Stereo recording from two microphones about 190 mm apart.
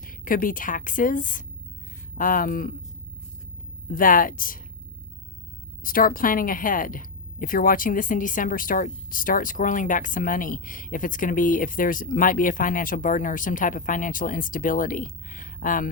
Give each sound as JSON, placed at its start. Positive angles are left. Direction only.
{"t": 0.0, "sound": "a woman's voice", "side_deg": 45}
{"t": 3.8, "sound": "a woman's voice", "side_deg": 45}
{"t": 5.8, "sound": "a woman's voice", "side_deg": 45}